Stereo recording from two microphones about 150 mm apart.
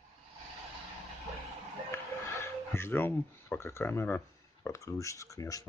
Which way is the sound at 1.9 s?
15° left (ahead or behind).